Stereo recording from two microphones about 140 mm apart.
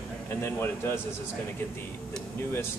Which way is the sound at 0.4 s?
15° left (ahead or behind).